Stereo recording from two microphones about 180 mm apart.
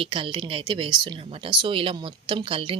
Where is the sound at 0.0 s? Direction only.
30° right (ahead or behind).